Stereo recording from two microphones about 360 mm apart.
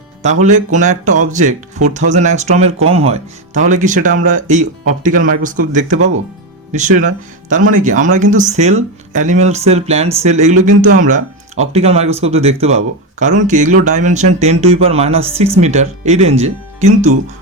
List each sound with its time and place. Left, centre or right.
0.2 s speech: centre